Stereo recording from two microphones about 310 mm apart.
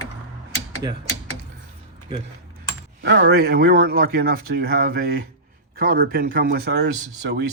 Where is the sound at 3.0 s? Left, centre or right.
Right.